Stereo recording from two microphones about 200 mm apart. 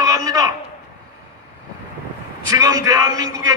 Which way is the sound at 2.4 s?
20° right (ahead or behind).